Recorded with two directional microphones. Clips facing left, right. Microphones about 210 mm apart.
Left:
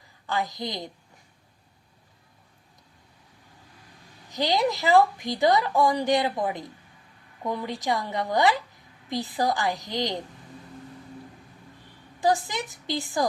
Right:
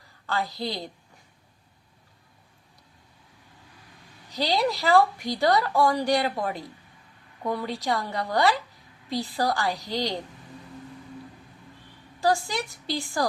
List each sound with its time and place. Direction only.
0.3 s a woman's voice: 15° left (ahead or behind)
4.3 s a woman's voice: 20° left (ahead or behind)
12.2 s a woman's voice: 15° left (ahead or behind)